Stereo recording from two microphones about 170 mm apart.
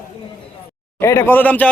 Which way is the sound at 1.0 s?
15° left (ahead or behind).